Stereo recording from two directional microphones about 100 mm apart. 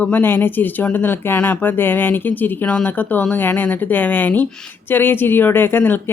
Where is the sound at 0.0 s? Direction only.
20° left (ahead or behind).